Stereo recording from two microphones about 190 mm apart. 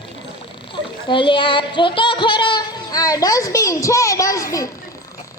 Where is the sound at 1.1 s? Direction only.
25° left (ahead or behind).